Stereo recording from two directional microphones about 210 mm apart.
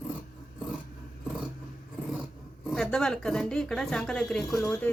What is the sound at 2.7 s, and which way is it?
Speech, centre (ahead or behind).